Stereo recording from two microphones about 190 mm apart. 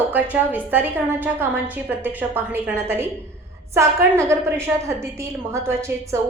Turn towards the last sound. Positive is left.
turn(degrees=-15)  # may be behind; listen again after turning